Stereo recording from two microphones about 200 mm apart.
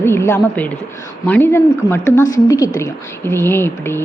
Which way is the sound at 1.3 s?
10° left (ahead or behind).